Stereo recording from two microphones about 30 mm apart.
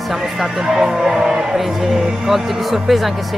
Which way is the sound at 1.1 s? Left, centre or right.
Right.